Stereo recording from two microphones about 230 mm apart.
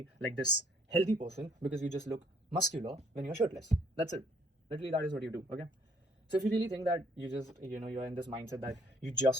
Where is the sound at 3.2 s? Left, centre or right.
Right.